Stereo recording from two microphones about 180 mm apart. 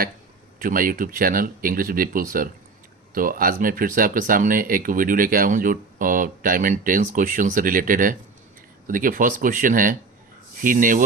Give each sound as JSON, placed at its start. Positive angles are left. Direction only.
{"t": 0.6, "sound": "speech", "side_deg": -50}